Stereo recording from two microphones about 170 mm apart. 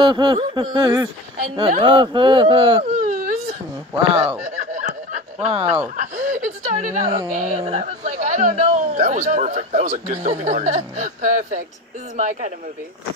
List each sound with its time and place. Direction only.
0.0 s speech: 25° right (ahead or behind)
2.8 s whimper: 55° right (ahead or behind)
3.9 s speech: 25° right (ahead or behind)
4.5 s snicker: 50° right (ahead or behind)
6.1 s chuckle: 50° right (ahead or behind)
7.3 s a man's voice: 50° right (ahead or behind)